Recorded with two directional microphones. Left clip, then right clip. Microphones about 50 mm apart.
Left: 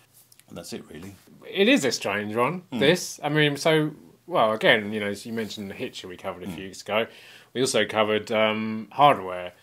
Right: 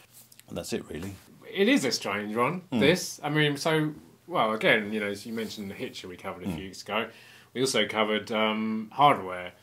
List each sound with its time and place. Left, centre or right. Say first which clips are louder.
0.5 s speech: right 4 dB; right
1.4 s speech: left 4 dB; left
9.2 s speech: left 3 dB; left